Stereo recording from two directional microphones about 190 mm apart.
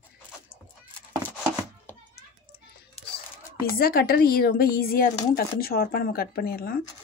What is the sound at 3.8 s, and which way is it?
Speech, 50° left (ahead or behind).